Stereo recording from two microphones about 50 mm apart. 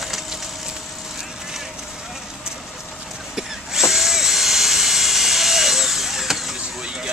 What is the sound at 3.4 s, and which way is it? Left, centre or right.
Drill, centre.